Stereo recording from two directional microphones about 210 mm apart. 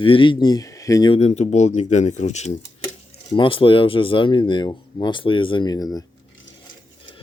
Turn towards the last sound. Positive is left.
turn(degrees=15)  # may be behind; listen again after turning